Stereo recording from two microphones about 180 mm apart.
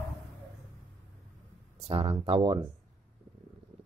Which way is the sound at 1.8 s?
30° right (ahead or behind).